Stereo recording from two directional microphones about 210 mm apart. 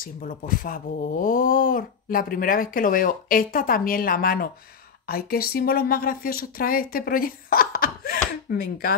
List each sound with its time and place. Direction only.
0.0 s speech: 40° left (ahead or behind)